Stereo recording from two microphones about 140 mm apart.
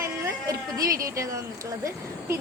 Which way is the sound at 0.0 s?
25° right (ahead or behind).